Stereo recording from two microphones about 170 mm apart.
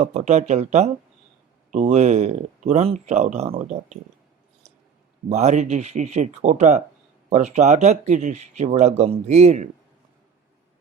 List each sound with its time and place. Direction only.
0.0 s speech: 40° right (ahead or behind)
5.3 s speech: 45° right (ahead or behind)